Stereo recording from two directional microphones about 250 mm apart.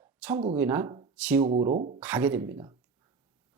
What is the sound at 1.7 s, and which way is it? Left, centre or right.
Speech, right.